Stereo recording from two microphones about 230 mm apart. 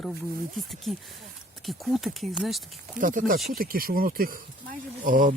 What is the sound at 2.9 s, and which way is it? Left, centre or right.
Speech, right.